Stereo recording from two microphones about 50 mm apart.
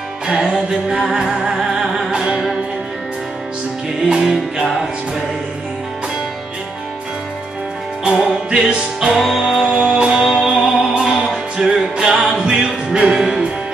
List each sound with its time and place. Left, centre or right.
0.3 s music: centre
4.1 s music: centre
8.0 s music: centre